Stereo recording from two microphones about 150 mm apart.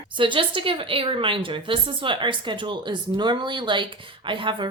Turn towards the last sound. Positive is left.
turn(degrees=-35)  # may be behind; listen again after turning